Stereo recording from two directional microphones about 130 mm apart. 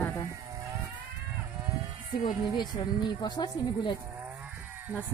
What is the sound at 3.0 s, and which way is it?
Speech, 35° left (ahead or behind).